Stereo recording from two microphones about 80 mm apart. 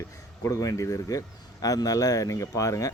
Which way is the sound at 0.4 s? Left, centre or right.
Left.